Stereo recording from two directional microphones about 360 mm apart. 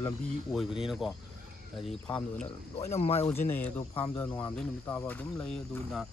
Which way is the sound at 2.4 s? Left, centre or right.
Centre.